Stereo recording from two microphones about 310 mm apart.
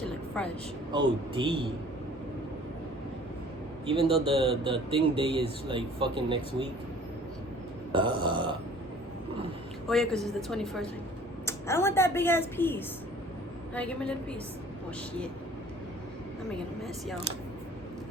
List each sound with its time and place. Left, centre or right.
0.4 s a woman's voice: centre
0.9 s speech: centre
4.1 s speech: centre
7.9 s speech: centre
9.9 s a woman's voice: centre